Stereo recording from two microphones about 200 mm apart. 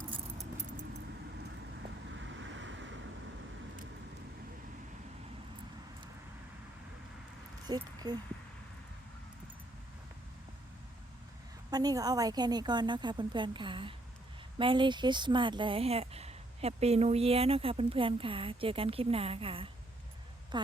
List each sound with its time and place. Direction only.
2.1 s vehicle: 70° right (ahead or behind)
7.7 s speech: 20° right (ahead or behind)
11.7 s speech: 20° right (ahead or behind)